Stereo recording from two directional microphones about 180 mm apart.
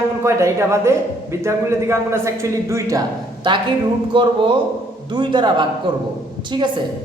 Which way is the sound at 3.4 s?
25° right (ahead or behind).